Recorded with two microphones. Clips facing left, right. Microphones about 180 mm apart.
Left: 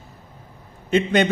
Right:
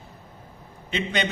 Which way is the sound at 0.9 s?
50° left (ahead or behind).